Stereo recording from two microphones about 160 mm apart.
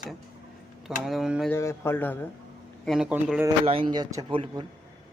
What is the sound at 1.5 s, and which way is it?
Speech, 15° left (ahead or behind).